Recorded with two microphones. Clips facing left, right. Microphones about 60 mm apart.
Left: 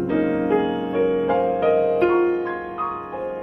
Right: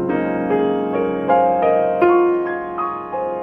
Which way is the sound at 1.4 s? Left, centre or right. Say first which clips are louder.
Right 3 dB; right.